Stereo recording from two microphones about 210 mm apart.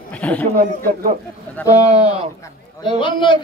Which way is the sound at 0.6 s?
40° right (ahead or behind).